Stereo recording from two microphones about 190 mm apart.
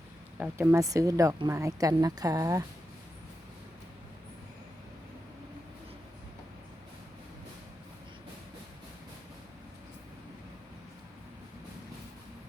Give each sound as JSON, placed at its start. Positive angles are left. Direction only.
{"t": 0.3, "sound": "speech", "side_deg": -10}